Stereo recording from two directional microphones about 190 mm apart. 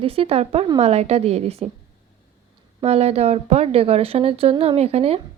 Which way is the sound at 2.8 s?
35° right (ahead or behind).